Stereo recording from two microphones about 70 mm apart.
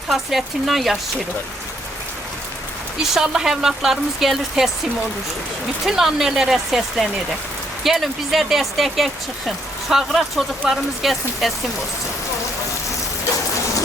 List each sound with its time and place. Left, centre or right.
0.1 s speech: centre
3.0 s speech: centre
5.8 s speech: centre